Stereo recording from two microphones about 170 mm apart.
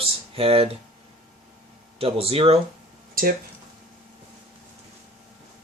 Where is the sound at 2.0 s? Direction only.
35° right (ahead or behind).